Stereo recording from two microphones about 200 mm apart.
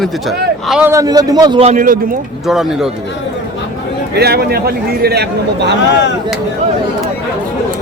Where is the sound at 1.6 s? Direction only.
40° right (ahead or behind).